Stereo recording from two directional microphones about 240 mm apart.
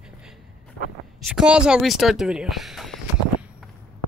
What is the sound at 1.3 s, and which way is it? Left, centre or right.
Speech, centre.